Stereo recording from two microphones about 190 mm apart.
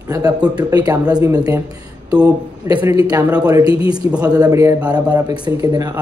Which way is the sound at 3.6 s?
30° left (ahead or behind).